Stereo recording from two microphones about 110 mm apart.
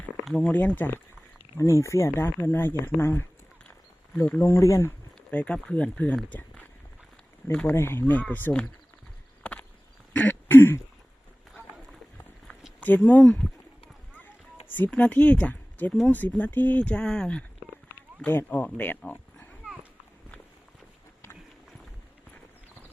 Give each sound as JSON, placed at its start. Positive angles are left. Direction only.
{"t": 0.3, "sound": "speech", "side_deg": 5}
{"t": 1.5, "sound": "speech", "side_deg": 25}
{"t": 4.4, "sound": "speech", "side_deg": 25}
{"t": 5.3, "sound": "speech", "side_deg": 10}
{"t": 7.5, "sound": "speech", "side_deg": 10}
{"t": 9.4, "sound": "a sound", "side_deg": 10}
{"t": 10.2, "sound": "throat clearing", "side_deg": 15}
{"t": 13.1, "sound": "speech", "side_deg": 10}
{"t": 14.7, "sound": "speech", "side_deg": 15}